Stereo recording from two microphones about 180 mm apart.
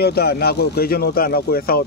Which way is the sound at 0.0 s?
60° left (ahead or behind).